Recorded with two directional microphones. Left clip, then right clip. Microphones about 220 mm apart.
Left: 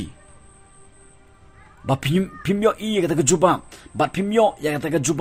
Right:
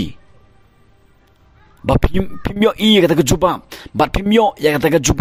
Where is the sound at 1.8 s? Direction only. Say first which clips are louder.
Right 5 dB; 45° right (ahead or behind).